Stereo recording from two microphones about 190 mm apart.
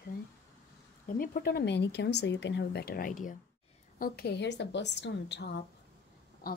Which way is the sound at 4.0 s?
55° left (ahead or behind).